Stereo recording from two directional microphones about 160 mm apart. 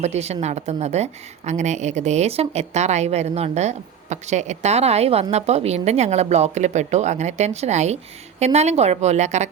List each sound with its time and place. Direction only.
0.0 s a woman's voice: 45° right (ahead or behind)